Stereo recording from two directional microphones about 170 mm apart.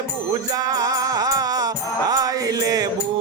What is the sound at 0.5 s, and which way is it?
Music, 20° right (ahead or behind).